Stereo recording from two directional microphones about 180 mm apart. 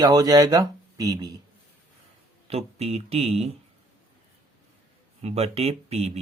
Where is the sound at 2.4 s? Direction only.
35° right (ahead or behind).